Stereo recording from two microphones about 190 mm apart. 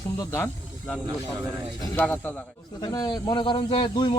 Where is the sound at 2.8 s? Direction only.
20° left (ahead or behind).